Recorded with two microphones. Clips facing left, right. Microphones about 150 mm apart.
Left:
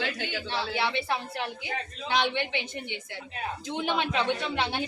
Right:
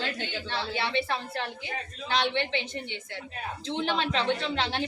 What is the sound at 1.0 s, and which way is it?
A woman's voice, 15° left (ahead or behind).